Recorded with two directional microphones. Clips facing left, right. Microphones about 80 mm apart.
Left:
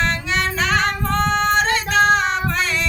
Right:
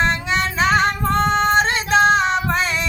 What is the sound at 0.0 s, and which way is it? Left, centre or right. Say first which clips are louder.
Female singing: right 2 dB; right.